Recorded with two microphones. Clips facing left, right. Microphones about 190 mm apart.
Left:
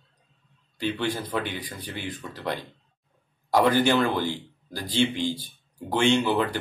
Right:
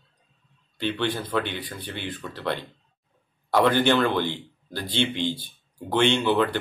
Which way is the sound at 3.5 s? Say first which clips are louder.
Even; 10° left (ahead or behind).